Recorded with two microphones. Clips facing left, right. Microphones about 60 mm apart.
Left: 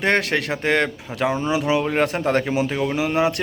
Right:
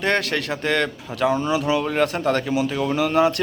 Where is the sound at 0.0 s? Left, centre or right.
Left.